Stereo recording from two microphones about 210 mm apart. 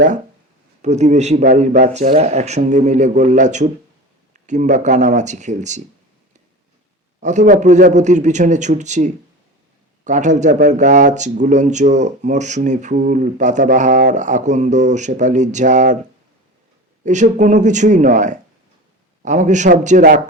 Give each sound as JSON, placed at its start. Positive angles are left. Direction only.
{"t": 0.8, "sound": "speech", "side_deg": -35}
{"t": 7.2, "sound": "speech", "side_deg": -35}
{"t": 17.1, "sound": "speech", "side_deg": -35}